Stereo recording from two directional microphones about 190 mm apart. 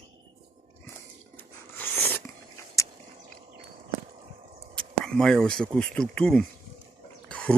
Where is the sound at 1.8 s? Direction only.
10° left (ahead or behind).